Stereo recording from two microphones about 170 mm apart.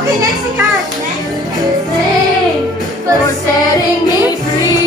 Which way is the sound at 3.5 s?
25° left (ahead or behind).